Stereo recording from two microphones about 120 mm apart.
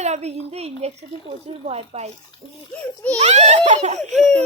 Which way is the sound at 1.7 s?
60° right (ahead or behind).